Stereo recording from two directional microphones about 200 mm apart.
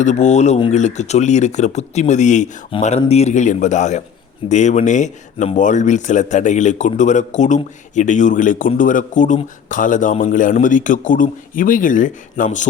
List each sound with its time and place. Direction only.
0.0 s speech: 35° left (ahead or behind)